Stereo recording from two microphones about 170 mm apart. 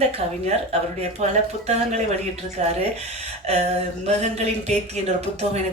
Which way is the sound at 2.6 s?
40° right (ahead or behind).